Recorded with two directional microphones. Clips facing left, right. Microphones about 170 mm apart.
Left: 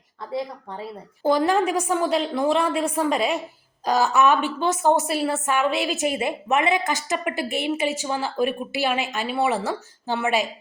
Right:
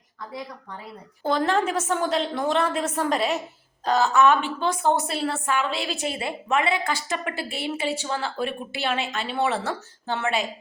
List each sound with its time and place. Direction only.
0.3 s speech: 25° left (ahead or behind)
1.2 s a woman's voice: 15° left (ahead or behind)
4.1 s a woman's voice: 15° left (ahead or behind)